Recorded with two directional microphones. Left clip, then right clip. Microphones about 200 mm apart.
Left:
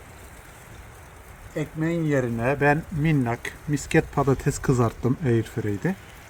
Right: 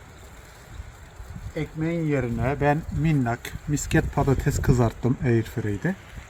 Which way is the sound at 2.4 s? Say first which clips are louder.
Left 3 dB; 20° right (ahead or behind).